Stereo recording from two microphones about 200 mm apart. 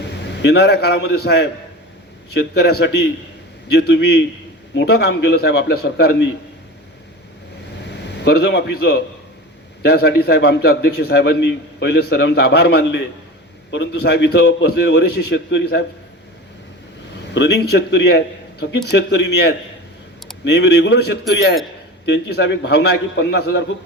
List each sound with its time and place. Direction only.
0.0 s a man's voice: 60° left (ahead or behind)
7.9 s a man's voice: 55° left (ahead or behind)
17.3 s a man's voice: 55° left (ahead or behind)